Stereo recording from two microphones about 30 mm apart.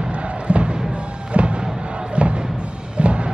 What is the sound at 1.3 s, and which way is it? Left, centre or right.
Music, right.